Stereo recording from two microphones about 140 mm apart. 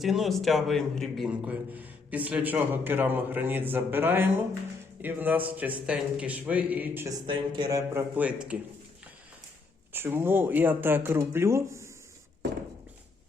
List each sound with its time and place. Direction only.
0.0 s a man's voice: centre (ahead or behind)
7.3 s speech: 35° right (ahead or behind)
7.8 s a man's voice: 15° right (ahead or behind)
9.9 s a man's voice: 15° right (ahead or behind)